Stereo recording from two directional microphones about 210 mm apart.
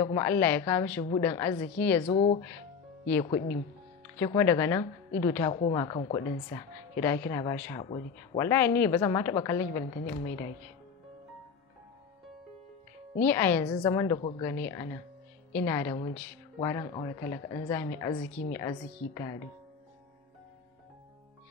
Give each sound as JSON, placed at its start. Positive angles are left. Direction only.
{"t": 0.0, "sound": "a woman's voice", "side_deg": 15}
{"t": 2.0, "sound": "speech", "side_deg": 30}
{"t": 4.2, "sound": "a woman's voice", "side_deg": 15}
{"t": 13.2, "sound": "a woman's voice", "side_deg": 10}
{"t": 16.0, "sound": "speech", "side_deg": 25}
{"t": 16.6, "sound": "a woman's voice", "side_deg": 15}